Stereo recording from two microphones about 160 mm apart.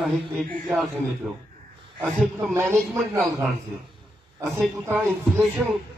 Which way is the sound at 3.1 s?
15° right (ahead or behind).